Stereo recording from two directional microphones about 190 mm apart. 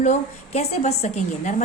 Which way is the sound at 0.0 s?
35° left (ahead or behind).